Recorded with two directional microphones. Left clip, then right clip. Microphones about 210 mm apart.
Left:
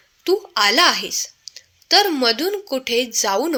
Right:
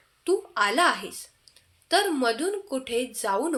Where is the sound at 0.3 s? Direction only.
35° left (ahead or behind).